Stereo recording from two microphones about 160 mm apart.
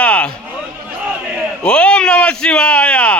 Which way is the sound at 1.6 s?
5° left (ahead or behind).